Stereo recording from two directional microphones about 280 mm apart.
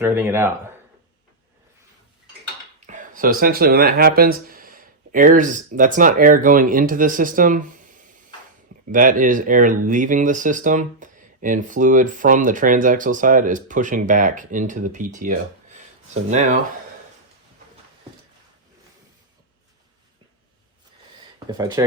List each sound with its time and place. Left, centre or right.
0.0 s speech: centre
2.8 s speech: right
21.3 s speech: centre